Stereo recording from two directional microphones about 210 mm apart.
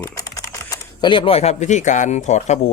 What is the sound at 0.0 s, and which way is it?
Speech, 15° left (ahead or behind).